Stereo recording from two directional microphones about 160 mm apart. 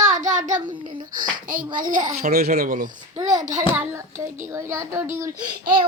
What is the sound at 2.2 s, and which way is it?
Music, 65° right (ahead or behind).